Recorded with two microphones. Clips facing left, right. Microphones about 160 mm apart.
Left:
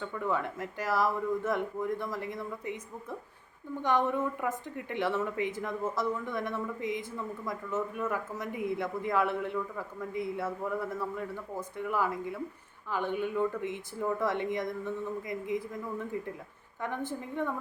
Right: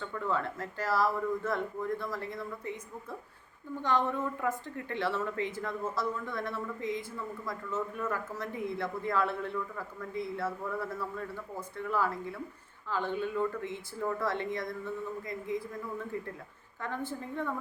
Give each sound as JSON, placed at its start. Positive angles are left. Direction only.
{"t": 0.0, "sound": "speech", "side_deg": 15}